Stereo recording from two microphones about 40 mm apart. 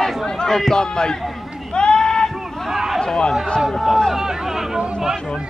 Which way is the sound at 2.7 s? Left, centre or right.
Centre.